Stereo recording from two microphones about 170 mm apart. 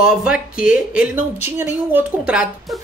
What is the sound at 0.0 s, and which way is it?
Speech, 5° right (ahead or behind).